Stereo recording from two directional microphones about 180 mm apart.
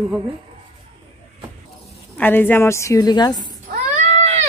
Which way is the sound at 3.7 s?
45° right (ahead or behind).